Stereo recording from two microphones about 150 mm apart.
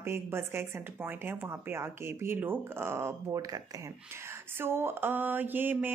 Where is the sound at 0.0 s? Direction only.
15° right (ahead or behind).